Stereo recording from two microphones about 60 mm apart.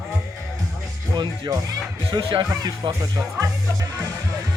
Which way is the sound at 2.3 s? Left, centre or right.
Right.